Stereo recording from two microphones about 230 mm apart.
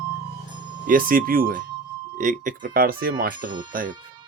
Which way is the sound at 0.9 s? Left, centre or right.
Right.